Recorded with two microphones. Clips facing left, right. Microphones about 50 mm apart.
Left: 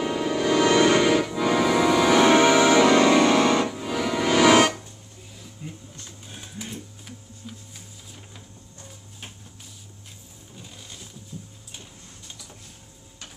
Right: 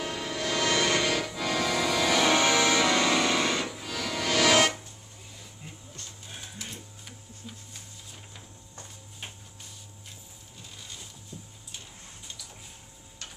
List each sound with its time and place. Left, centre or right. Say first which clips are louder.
0.0 s music: left 8 dB; centre
5.4 s a sound: left 9 dB; centre
6.6 s printer: left 5 dB; centre